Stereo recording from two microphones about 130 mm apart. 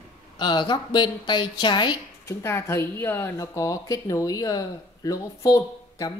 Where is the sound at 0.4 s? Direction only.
35° left (ahead or behind).